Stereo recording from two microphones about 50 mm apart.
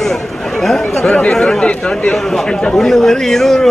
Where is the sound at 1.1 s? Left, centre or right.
Centre.